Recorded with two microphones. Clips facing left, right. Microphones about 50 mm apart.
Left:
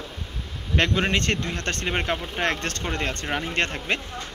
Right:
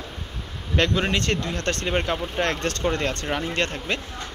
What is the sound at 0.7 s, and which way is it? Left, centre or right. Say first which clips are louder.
Speech: even; left.